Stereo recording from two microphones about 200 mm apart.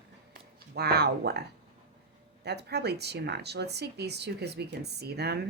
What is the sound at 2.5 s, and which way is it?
Speech, 55° right (ahead or behind).